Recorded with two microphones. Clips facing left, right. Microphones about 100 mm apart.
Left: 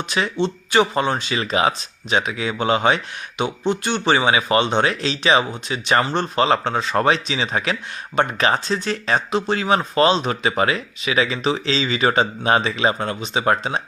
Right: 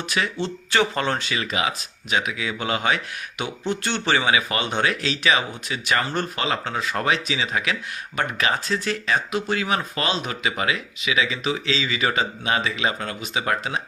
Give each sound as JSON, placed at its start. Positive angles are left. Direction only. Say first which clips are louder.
{"t": 0.1, "sound": "speech", "louder": "left 4 dB", "side_deg": 20}
{"t": 1.3, "sound": "speech", "louder": "left 5 dB", "side_deg": 30}